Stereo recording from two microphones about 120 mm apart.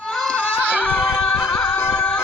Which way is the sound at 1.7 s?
20° left (ahead or behind).